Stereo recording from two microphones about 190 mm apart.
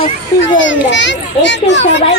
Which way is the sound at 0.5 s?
80° left.